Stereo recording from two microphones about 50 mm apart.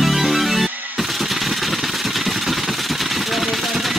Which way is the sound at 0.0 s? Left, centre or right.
Centre.